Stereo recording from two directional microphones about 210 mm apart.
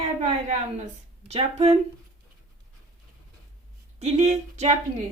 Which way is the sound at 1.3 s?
30° right (ahead or behind).